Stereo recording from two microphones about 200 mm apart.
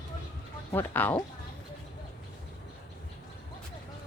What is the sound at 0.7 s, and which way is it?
Speech, 10° left (ahead or behind).